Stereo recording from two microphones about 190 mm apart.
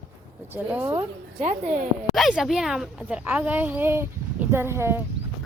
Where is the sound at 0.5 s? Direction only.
10° right (ahead or behind).